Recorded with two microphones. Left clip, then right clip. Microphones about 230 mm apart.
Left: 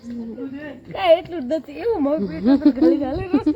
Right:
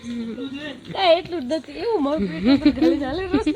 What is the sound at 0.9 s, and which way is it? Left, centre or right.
Speech, centre.